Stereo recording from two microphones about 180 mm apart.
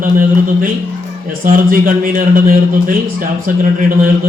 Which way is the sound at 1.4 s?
50° right (ahead or behind).